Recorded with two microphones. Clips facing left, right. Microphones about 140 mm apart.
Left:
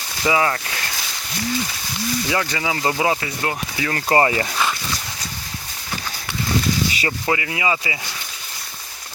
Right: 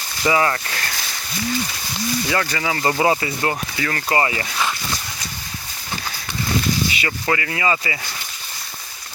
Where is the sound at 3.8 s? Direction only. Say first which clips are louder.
Left 4 dB; 25° left (ahead or behind).